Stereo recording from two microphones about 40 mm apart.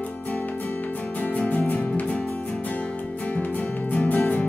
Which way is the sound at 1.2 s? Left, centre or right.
Left.